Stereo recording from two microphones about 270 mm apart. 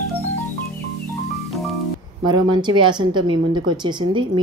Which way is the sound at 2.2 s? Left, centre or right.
Centre.